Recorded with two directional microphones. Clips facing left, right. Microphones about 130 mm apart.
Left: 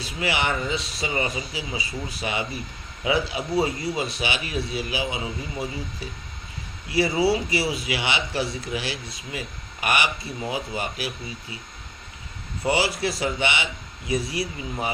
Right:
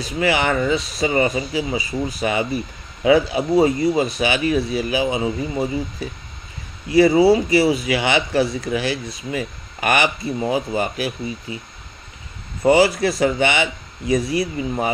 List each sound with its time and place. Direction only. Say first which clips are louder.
0.0 s a man's voice: right 6 dB; 45° right (ahead or behind)
12.6 s a man's voice: right 9 dB; 45° right (ahead or behind)